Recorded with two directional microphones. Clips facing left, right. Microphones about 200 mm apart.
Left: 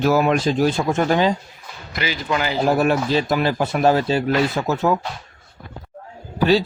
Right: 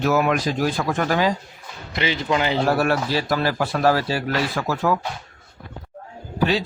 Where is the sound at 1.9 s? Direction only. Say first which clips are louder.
Right 1 dB; 25° right (ahead or behind).